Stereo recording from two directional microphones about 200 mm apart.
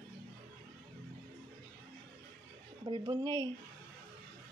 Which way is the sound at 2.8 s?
25° right (ahead or behind).